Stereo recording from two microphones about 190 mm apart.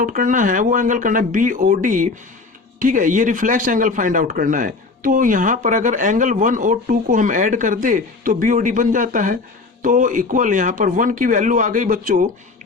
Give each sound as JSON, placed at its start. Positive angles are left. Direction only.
{"t": 0.0, "sound": "speech", "side_deg": -45}